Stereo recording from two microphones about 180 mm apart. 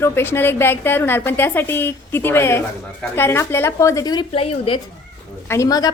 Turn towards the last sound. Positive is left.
turn(degrees=20)  # may be behind; listen again after turning